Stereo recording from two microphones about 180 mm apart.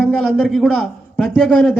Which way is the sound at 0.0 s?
Centre (ahead or behind).